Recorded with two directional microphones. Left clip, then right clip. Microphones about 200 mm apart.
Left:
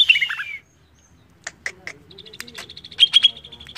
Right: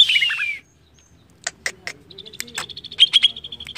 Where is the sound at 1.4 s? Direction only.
40° right (ahead or behind).